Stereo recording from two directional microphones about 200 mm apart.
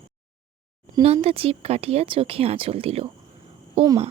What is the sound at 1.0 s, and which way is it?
A woman's voice, 30° right (ahead or behind).